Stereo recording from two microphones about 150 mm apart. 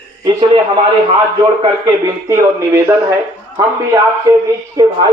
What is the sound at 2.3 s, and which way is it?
Speech, 15° right (ahead or behind).